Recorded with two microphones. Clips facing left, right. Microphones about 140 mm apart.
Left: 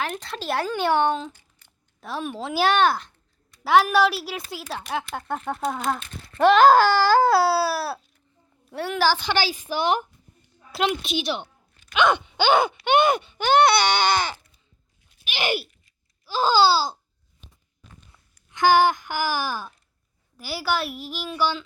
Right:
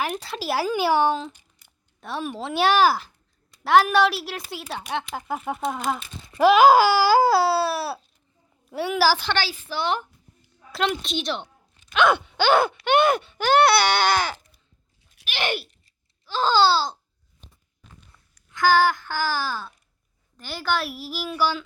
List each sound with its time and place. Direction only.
0.0 s a woman's voice: 5° right (ahead or behind)
1.3 s a sound: 15° right (ahead or behind)
2.0 s a woman's voice: centre (ahead or behind)
9.3 s speech: 15° left (ahead or behind)
10.7 s a woman's voice: 5° left (ahead or behind)
18.3 s a woman's voice: 20° left (ahead or behind); by 21.6 s 5° right (ahead or behind)